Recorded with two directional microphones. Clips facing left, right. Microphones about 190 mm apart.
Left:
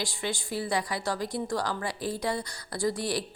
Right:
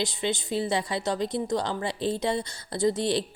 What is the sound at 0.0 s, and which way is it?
Speech, 20° right (ahead or behind).